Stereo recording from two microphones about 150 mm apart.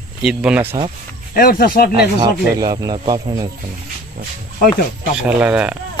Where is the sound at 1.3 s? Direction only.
90° left.